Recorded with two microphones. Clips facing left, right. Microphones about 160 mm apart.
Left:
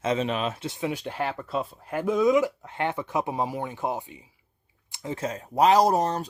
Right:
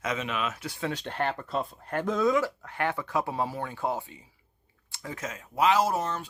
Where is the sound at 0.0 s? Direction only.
30° left (ahead or behind).